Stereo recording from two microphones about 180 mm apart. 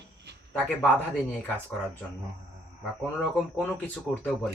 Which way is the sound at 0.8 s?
10° left (ahead or behind).